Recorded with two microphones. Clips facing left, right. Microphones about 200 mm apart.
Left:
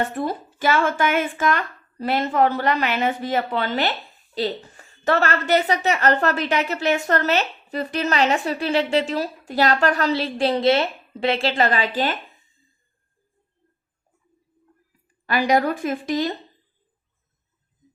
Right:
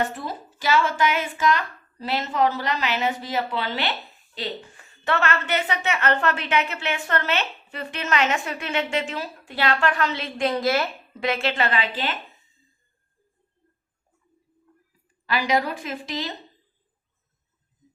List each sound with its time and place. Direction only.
0.1 s speech: 55° left (ahead or behind)
4.4 s a woman's voice: 40° left (ahead or behind)
15.3 s speech: 50° left (ahead or behind)